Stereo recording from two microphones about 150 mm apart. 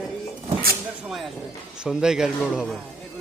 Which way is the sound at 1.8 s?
5° right (ahead or behind).